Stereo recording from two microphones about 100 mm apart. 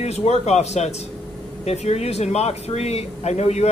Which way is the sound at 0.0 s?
90° left.